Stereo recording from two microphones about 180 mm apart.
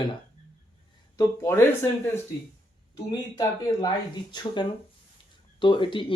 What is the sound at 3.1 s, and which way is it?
Speech, 20° left (ahead or behind).